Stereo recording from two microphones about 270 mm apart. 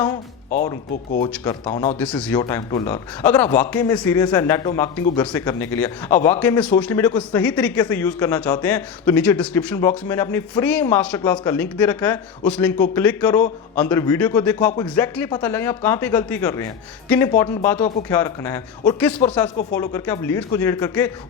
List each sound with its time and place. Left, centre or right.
1.5 s speech: left
2.0 s a man's voice: centre